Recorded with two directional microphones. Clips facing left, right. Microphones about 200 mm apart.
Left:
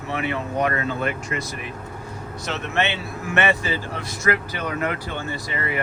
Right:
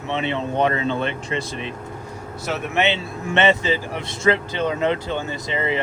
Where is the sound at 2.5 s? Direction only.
10° right (ahead or behind).